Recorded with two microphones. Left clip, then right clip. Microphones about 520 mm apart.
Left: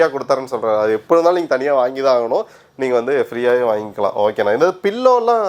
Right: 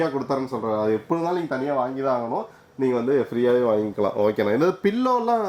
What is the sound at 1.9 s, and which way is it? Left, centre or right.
Speech, left.